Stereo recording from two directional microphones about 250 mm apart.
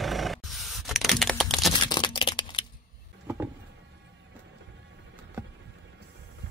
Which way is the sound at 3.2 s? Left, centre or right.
Centre.